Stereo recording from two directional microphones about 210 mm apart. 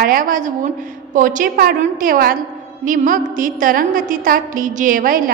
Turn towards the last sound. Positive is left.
turn(degrees=-40)  # may be behind; listen again after turning